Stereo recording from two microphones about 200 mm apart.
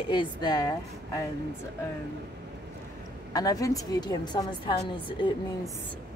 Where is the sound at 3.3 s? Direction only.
20° left (ahead or behind).